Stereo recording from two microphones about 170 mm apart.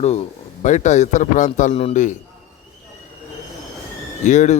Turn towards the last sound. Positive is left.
turn(degrees=45)  # may be behind; listen again after turning